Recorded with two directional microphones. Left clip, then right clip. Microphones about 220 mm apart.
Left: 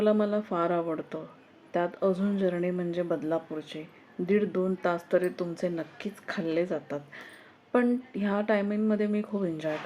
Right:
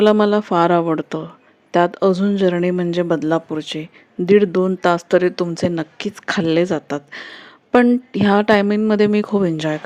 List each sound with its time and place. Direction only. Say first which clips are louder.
0.0 s speech: right 12 dB; 45° right (ahead or behind)